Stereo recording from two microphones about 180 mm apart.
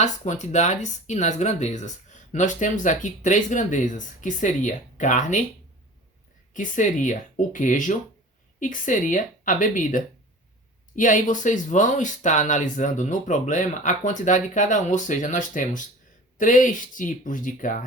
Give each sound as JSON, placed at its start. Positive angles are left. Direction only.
{"t": 0.0, "sound": "speech", "side_deg": 40}
{"t": 6.5, "sound": "speech", "side_deg": 45}